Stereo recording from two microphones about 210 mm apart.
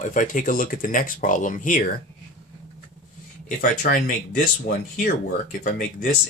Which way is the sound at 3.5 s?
45° left (ahead or behind).